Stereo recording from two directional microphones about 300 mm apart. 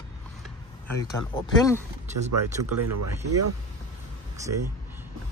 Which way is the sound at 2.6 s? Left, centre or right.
Right.